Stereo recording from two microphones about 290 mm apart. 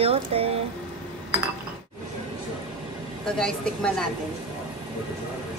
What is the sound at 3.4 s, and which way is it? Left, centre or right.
Speech, centre.